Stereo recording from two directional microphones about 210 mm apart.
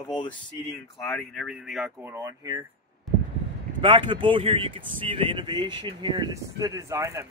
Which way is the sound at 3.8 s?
25° right (ahead or behind).